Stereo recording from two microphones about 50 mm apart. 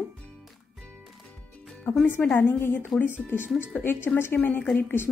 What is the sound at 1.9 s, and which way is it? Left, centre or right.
A woman's voice, left.